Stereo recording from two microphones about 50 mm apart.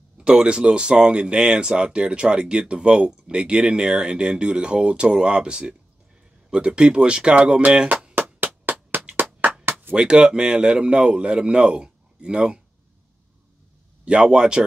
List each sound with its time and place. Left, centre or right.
0.2 s speech: right
8.1 s music: right
9.9 s speech: centre
14.0 s speech: centre